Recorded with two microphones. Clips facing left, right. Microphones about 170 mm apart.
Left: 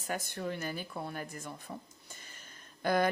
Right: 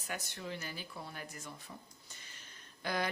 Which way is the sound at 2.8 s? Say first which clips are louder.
Left 8 dB; 50° left (ahead or behind).